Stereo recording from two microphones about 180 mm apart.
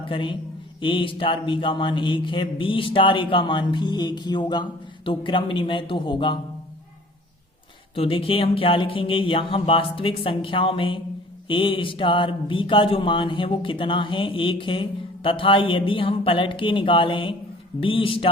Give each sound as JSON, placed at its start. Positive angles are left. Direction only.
{"t": 0.0, "sound": "a man's voice", "side_deg": 25}
{"t": 7.9, "sound": "speech", "side_deg": 30}